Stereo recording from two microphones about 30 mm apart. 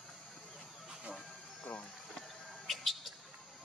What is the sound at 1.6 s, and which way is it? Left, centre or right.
Music, left.